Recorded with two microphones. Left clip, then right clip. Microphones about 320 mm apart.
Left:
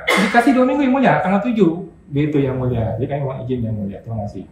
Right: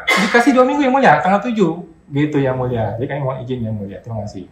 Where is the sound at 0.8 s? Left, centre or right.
Centre.